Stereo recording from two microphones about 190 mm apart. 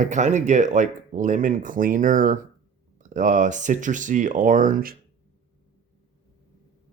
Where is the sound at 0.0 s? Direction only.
40° right (ahead or behind).